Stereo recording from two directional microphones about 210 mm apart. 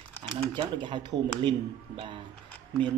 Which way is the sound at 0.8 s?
20° right (ahead or behind).